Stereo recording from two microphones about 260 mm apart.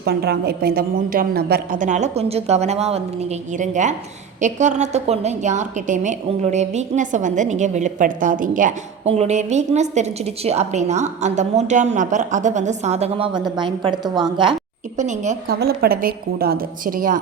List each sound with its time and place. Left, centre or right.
0.0 s a woman's voice: right
15.5 s a woman's voice: right